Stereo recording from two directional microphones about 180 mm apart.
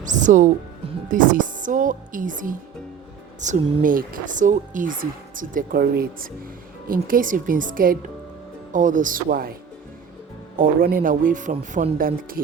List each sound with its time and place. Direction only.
0.0 s speech: 45° right (ahead or behind)
10.6 s speech: 55° right (ahead or behind)